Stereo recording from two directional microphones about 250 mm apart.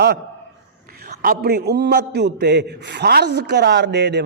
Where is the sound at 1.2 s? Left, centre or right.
Right.